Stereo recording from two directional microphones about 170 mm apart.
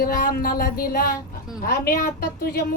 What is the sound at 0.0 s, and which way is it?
Speech, 55° left (ahead or behind).